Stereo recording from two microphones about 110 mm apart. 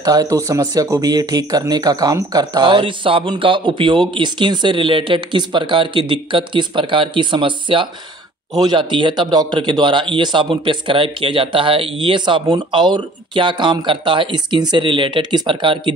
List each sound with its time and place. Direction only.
0.0 s speech: 35° right (ahead or behind); by 15.9 s 50° right (ahead or behind)